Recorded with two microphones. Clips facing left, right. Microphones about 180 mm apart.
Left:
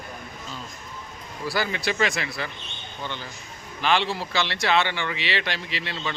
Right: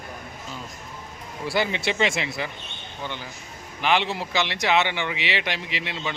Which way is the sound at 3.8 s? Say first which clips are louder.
Even; 20° right (ahead or behind).